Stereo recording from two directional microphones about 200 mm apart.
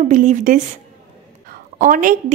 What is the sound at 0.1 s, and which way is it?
Speech, 40° right (ahead or behind).